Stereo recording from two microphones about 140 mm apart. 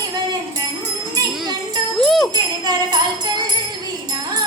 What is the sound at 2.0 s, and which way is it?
Jingle bell, centre (ahead or behind).